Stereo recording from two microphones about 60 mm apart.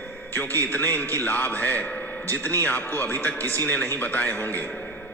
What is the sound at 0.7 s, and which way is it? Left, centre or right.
A man's voice, left.